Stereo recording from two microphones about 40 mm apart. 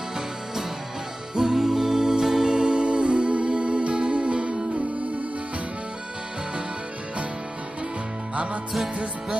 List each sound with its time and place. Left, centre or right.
1.3 s music: centre
8.9 s music: right